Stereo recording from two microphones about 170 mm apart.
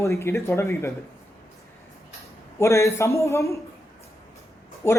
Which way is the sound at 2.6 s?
15° left (ahead or behind).